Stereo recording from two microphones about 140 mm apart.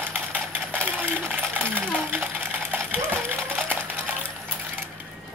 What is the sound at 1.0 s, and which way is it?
Coin, 15° right (ahead or behind).